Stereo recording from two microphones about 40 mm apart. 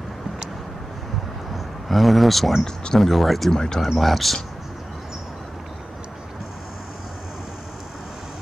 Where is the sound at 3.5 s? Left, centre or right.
Centre.